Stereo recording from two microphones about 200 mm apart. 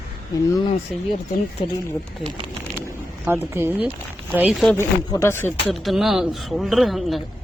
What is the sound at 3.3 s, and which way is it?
A woman's voice, 10° right (ahead or behind).